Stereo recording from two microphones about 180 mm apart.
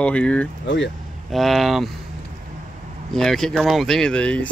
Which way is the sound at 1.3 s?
Centre (ahead or behind).